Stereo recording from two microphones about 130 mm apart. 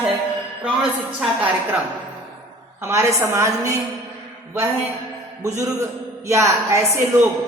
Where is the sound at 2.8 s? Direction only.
20° right (ahead or behind).